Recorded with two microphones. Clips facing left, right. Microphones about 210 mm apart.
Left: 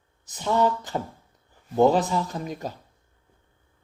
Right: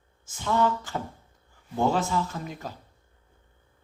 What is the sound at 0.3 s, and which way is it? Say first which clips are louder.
Speech: left 2 dB; 20° left (ahead or behind).